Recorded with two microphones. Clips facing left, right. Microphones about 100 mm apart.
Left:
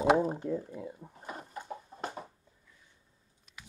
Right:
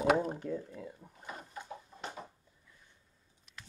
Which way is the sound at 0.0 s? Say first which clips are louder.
Left 3 dB; 25° left (ahead or behind).